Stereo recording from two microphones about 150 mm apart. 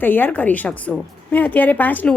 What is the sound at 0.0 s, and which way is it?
A woman's voice, 15° left (ahead or behind).